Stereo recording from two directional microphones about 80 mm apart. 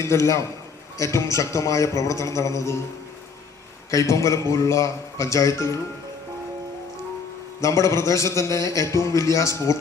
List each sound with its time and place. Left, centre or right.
0.0 s a man's voice: left
3.9 s a man's voice: left
7.6 s a man's voice: left